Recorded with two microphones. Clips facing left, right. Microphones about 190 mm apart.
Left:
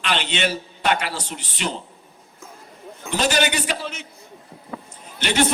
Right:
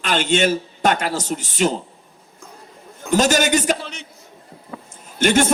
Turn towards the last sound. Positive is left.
turn(degrees=-45)  # may be behind; listen again after turning